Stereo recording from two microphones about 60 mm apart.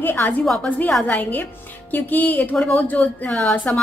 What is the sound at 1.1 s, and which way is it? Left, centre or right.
Speech, left.